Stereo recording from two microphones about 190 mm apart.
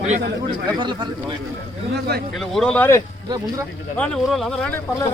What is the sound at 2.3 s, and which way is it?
Speech, centre (ahead or behind).